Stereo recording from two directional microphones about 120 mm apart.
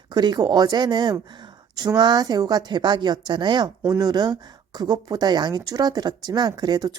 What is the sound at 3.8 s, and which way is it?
Speech, 25° right (ahead or behind).